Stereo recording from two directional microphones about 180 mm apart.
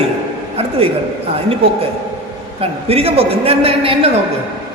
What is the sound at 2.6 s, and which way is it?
A man's voice, 35° right (ahead or behind).